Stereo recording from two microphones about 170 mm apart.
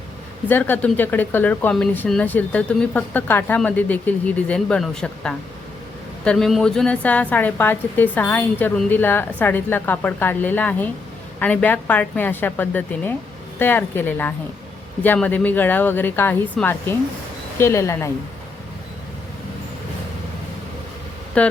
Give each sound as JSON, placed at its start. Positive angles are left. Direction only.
{"t": 0.4, "sound": "speech", "side_deg": 10}
{"t": 21.4, "sound": "speech", "side_deg": 5}